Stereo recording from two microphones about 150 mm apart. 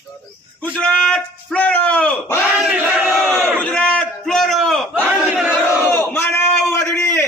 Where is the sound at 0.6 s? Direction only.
10° left (ahead or behind).